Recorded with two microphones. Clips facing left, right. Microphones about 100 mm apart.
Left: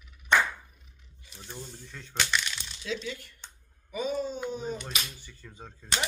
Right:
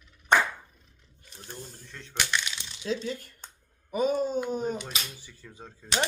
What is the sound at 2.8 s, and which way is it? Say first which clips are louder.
Speech: right 4 dB; 40° right (ahead or behind).